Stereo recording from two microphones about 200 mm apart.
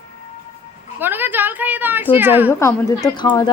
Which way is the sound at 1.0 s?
10° right (ahead or behind).